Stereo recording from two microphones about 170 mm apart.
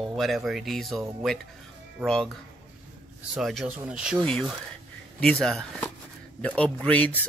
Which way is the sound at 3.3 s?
5° right (ahead or behind).